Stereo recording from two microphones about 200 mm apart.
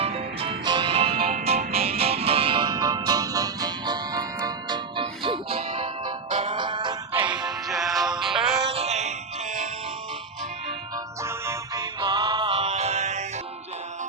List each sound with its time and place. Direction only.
0.0 s music: 30° right (ahead or behind)
7.4 s music: centre (ahead or behind)
8.7 s music: 30° right (ahead or behind)
10.9 s music: 15° right (ahead or behind); by 13.2 s 35° right (ahead or behind)